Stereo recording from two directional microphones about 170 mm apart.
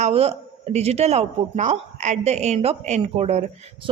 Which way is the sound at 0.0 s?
35° right (ahead or behind).